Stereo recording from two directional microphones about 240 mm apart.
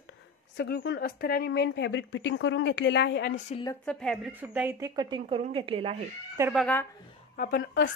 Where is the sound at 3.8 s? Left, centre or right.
Centre; by 6.0 s right.